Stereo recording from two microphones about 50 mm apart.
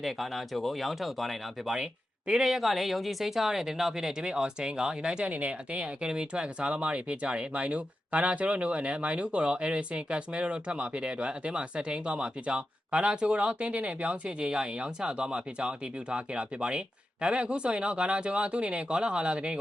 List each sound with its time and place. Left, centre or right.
0.0 s speech: centre
1.7 s speech: centre
5.3 s speech: right